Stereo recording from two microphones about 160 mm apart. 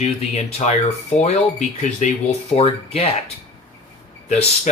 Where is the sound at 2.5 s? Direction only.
40° left (ahead or behind).